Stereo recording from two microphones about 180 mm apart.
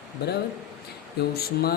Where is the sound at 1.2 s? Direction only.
60° left (ahead or behind).